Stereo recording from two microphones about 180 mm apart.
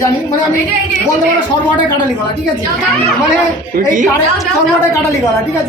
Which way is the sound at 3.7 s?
50° right (ahead or behind).